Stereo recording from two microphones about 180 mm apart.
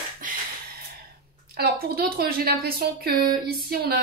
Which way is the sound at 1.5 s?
60° right (ahead or behind).